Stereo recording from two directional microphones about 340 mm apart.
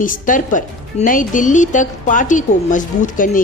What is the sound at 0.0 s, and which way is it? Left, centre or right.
A woman's voice, left.